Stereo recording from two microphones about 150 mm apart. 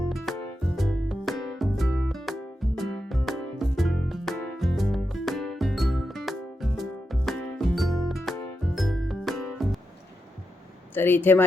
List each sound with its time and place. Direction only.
0.3 s music: centre (ahead or behind)
10.9 s speech: 15° left (ahead or behind)